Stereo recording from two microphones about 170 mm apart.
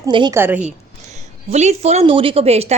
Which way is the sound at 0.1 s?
30° right (ahead or behind).